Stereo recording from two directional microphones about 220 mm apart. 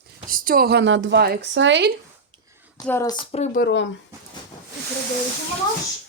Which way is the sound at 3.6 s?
55° left (ahead or behind).